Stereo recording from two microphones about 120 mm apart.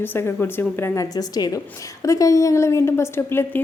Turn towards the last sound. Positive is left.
turn(degrees=20)  # may be behind; listen again after turning